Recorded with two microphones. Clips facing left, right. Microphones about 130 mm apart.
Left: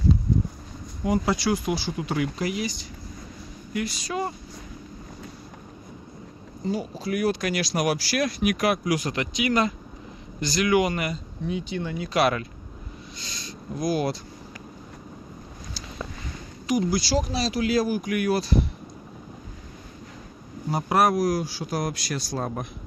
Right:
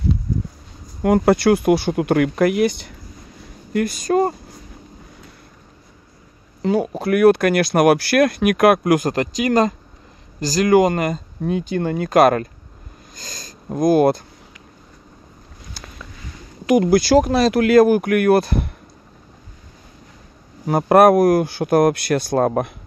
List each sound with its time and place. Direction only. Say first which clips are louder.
1.0 s speech: right 9 dB; 60° right (ahead or behind)
6.6 s speech: right 9 dB; 65° right (ahead or behind)
16.6 s speech: right 10 dB; 60° right (ahead or behind)
20.6 s speech: right 10 dB; 55° right (ahead or behind)